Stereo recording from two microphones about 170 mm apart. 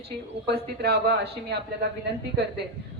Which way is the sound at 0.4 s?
70° right (ahead or behind).